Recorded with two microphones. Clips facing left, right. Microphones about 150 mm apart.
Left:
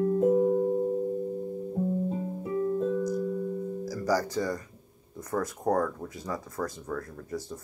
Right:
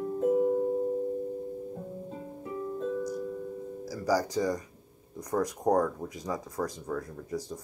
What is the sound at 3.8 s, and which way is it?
Speech, 10° right (ahead or behind).